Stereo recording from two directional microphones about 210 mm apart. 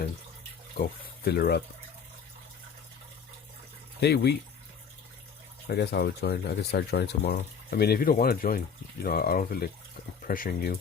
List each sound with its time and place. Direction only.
0.8 s speech: 50° left (ahead or behind)
4.0 s speech: 50° left (ahead or behind)
5.6 s speech: 50° left (ahead or behind)